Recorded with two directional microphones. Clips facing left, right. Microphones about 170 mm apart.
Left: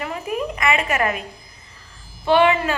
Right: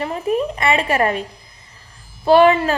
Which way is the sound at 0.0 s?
30° right (ahead or behind).